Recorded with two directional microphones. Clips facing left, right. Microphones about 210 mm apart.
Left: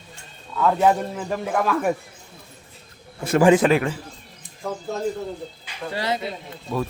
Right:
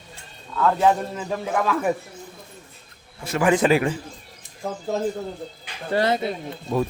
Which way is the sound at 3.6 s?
5° right (ahead or behind).